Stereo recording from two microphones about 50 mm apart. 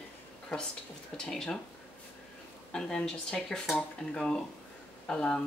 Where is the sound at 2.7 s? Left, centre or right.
Centre.